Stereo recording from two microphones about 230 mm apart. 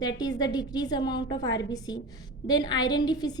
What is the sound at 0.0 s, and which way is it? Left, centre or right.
A woman's voice, centre.